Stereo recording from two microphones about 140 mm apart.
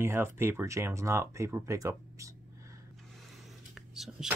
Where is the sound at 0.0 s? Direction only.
15° right (ahead or behind).